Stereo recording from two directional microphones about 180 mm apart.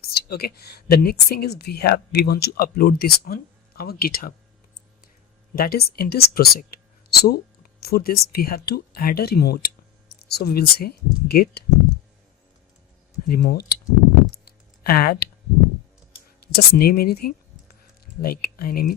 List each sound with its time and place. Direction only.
0.0 s speech: 60° left (ahead or behind)
5.5 s speech: 60° left (ahead or behind)
13.2 s speech: 55° left (ahead or behind)
14.4 s a sound: 55° left (ahead or behind)
16.4 s speech: 60° left (ahead or behind)